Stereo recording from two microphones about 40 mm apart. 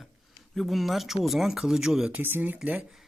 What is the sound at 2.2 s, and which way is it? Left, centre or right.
Speech, right.